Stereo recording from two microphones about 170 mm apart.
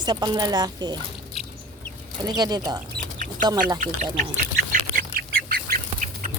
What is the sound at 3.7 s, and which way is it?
Speech, 50° right (ahead or behind).